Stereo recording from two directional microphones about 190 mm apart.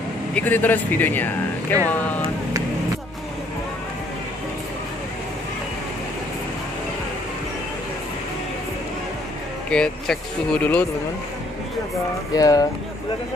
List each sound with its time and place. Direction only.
0.3 s speech: 10° left (ahead or behind)
9.7 s speech: 5° left (ahead or behind)
12.4 s speech: 20° left (ahead or behind)